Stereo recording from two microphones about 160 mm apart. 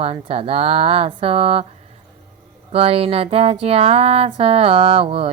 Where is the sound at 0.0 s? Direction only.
35° right (ahead or behind).